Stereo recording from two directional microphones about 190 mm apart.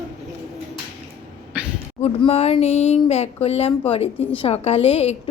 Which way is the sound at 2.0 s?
30° left (ahead or behind).